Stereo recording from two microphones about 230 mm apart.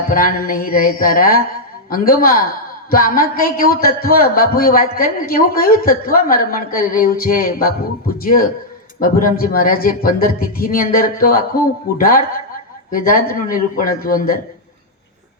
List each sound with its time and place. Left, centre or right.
0.1 s a man's voice: left